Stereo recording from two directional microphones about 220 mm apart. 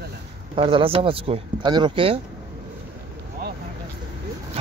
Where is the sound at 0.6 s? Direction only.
25° right (ahead or behind).